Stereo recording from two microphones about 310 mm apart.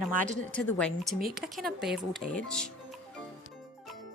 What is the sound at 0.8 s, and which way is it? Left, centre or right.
A woman's voice, centre.